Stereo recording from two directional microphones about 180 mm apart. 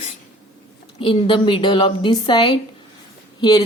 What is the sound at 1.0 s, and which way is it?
A woman's voice, 25° left (ahead or behind).